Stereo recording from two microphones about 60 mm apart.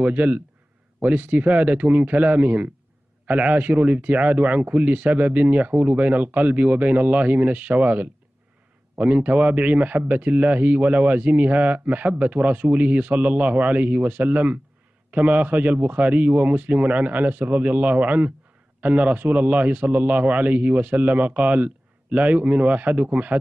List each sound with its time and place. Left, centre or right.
0.0 s a man's voice: right